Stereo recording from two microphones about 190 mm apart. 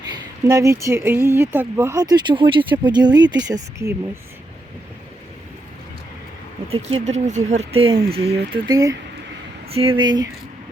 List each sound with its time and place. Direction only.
0.1 s speech: 15° right (ahead or behind)
7.0 s speech: 40° right (ahead or behind)
8.5 s speech: 20° right (ahead or behind)
9.6 s speech: 30° right (ahead or behind)